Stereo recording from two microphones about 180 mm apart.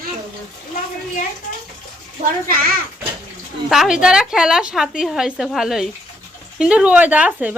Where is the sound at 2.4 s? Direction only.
55° right (ahead or behind).